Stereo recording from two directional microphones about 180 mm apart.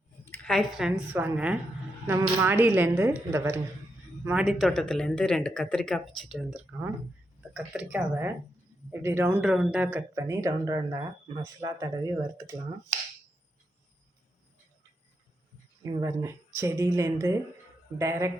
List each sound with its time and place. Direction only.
0.3 s speech: 5° left (ahead or behind)
10.2 s speech: 20° right (ahead or behind)
15.8 s speech: 20° right (ahead or behind)